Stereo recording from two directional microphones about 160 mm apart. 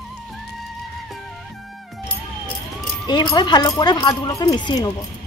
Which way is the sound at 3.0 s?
25° left (ahead or behind).